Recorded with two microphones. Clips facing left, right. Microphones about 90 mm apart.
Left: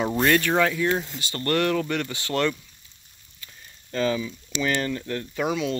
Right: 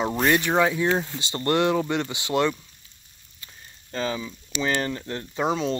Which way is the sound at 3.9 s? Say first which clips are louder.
Left 4 dB; 25° right (ahead or behind).